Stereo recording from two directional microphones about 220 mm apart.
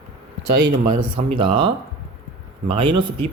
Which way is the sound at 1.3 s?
20° right (ahead or behind).